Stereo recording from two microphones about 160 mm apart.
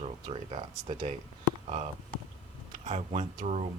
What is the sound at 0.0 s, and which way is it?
Speech, 40° right (ahead or behind).